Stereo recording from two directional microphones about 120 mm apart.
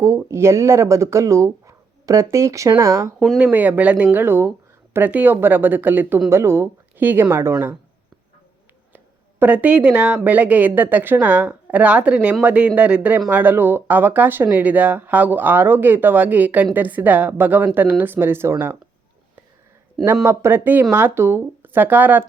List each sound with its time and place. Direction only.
0.3 s speech: 25° right (ahead or behind)
3.2 s speech: 5° right (ahead or behind)
9.4 s speech: 10° right (ahead or behind)
20.2 s speech: 20° right (ahead or behind)